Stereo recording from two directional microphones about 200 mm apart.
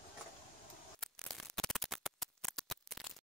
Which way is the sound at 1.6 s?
Centre (ahead or behind).